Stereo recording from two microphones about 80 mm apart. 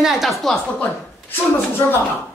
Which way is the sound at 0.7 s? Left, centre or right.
Left.